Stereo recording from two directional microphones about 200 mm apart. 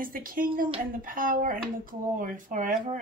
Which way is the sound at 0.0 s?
45° right (ahead or behind).